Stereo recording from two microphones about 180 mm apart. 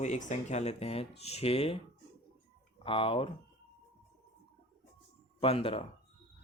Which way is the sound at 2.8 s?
30° left (ahead or behind).